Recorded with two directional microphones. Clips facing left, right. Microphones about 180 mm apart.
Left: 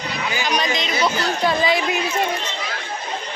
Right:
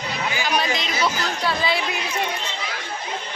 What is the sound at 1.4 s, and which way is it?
Speech, 15° left (ahead or behind).